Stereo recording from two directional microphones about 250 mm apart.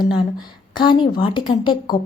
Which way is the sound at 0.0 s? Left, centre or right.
Centre.